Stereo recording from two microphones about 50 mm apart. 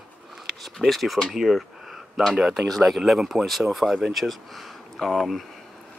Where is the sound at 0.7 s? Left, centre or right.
Centre.